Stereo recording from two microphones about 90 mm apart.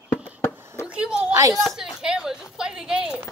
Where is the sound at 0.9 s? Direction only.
10° right (ahead or behind).